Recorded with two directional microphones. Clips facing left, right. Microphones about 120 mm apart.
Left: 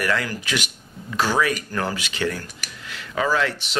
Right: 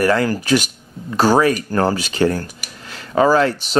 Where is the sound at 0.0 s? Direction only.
35° right (ahead or behind).